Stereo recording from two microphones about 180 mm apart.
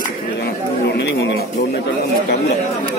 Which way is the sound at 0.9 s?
75° left (ahead or behind).